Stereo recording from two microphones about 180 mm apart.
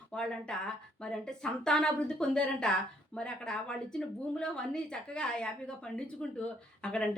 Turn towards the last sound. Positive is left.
turn(degrees=5)  # may be behind; listen again after turning